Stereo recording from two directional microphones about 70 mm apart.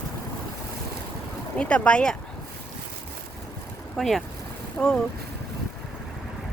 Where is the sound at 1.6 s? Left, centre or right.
Centre.